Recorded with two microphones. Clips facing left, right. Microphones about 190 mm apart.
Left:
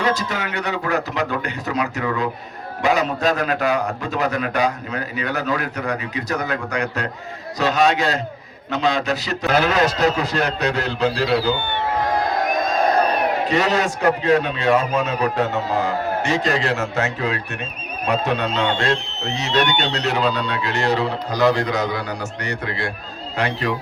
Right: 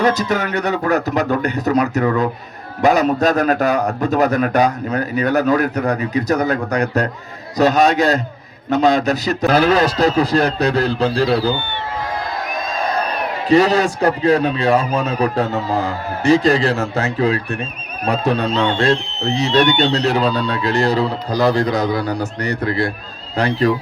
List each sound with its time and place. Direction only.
0.0 s a man's voice: 40° right (ahead or behind)
13.5 s a man's voice: 35° right (ahead or behind)